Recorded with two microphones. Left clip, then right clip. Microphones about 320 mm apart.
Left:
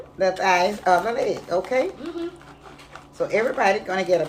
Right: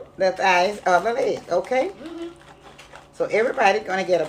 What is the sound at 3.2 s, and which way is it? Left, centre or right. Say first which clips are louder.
A woman's voice: right 2 dB; centre.